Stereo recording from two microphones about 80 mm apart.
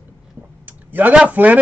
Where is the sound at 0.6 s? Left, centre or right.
Right.